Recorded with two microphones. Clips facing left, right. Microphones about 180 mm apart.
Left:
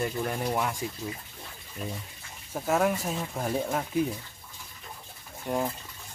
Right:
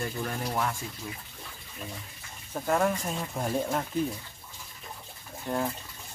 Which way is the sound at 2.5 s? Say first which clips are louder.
Left 1 dB; 5° left (ahead or behind).